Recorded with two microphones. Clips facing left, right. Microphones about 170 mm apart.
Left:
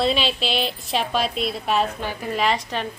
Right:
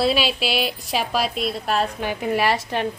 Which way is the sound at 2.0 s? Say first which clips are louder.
Right 3 dB; 15° right (ahead or behind).